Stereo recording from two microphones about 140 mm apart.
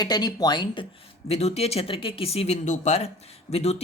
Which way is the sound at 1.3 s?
50° left (ahead or behind).